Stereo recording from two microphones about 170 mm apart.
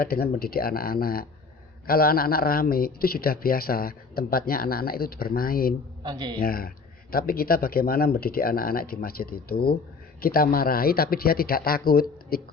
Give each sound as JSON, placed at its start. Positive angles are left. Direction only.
{"t": 0.0, "sound": "speech", "side_deg": 65}
{"t": 6.0, "sound": "speech", "side_deg": -25}
{"t": 6.4, "sound": "speech", "side_deg": 60}